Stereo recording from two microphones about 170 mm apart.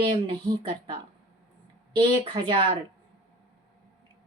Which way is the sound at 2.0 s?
30° right (ahead or behind).